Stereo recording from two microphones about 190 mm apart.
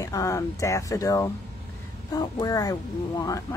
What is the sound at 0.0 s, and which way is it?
Speech, 15° left (ahead or behind).